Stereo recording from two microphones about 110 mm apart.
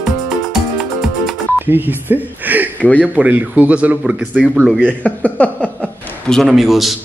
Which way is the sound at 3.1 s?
15° right (ahead or behind).